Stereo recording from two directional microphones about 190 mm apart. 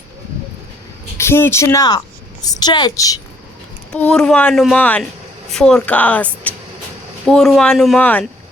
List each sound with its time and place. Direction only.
1.2 s a woman's voice: 15° left (ahead or behind)
3.9 s speech: 5° left (ahead or behind)